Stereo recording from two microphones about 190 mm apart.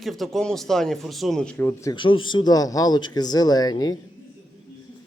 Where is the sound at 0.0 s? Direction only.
Centre (ahead or behind); by 3.9 s 20° left (ahead or behind).